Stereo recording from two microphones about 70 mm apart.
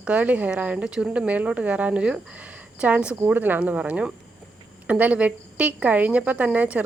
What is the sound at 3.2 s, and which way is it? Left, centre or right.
A woman's voice, right.